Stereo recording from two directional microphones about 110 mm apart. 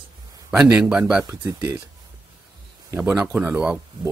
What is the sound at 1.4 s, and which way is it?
Speech, 30° right (ahead or behind).